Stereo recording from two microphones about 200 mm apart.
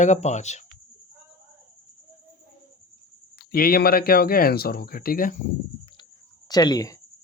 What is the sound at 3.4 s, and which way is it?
Speech, 50° left (ahead or behind).